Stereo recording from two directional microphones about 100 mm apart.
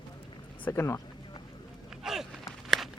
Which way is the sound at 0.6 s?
25° left (ahead or behind).